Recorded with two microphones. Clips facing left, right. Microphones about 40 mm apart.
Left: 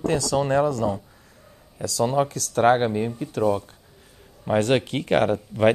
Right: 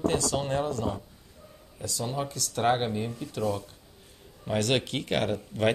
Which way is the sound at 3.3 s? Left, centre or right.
Left.